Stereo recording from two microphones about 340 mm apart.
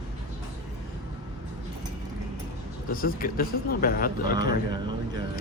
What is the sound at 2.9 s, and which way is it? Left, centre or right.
Speech, left.